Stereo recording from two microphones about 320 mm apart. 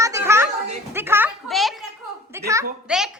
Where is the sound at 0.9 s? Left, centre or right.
Centre.